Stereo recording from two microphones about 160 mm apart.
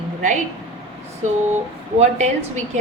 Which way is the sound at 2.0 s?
45° right (ahead or behind).